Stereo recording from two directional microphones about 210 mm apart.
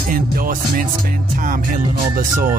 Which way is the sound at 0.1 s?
40° right (ahead or behind).